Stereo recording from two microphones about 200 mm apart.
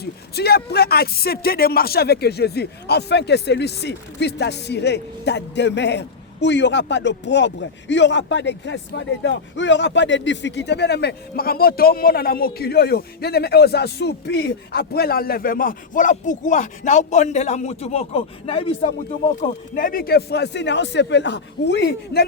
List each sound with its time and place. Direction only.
0.0 s speech: 50° left (ahead or behind); by 18.9 s 25° left (ahead or behind)
19.4 s a man's voice: 45° left (ahead or behind)